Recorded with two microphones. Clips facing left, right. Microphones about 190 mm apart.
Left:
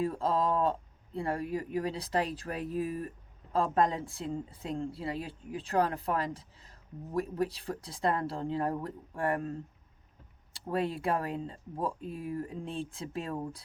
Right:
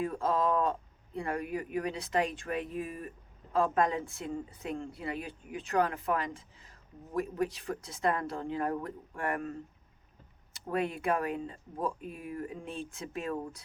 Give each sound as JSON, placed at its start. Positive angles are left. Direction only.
{"t": 0.0, "sound": "speech", "side_deg": 30}